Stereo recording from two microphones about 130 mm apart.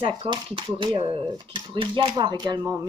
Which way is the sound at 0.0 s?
45° right (ahead or behind).